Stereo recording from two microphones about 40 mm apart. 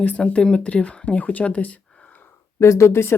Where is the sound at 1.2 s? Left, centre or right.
Left.